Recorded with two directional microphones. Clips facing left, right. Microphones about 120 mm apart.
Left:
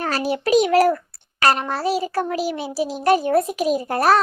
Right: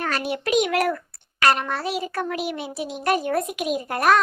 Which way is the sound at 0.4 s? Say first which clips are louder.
Left 6 dB; 35° left (ahead or behind).